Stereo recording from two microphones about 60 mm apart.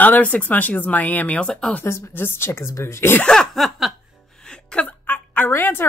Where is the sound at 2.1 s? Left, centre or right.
Left.